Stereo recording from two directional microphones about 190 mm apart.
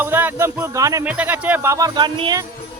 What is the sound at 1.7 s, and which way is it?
Speech, 20° right (ahead or behind).